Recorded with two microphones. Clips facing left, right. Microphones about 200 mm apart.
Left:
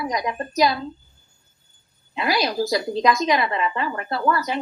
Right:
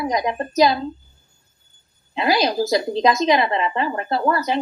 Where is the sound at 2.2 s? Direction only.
20° right (ahead or behind).